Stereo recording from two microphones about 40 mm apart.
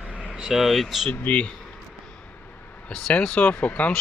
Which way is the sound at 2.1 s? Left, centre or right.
Left.